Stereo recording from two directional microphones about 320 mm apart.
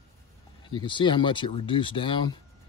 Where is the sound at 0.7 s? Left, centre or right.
Centre.